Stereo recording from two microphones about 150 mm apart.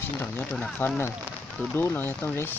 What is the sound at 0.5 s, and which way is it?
Speech, 10° left (ahead or behind).